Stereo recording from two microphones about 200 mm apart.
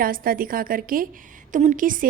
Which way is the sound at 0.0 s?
45° right (ahead or behind).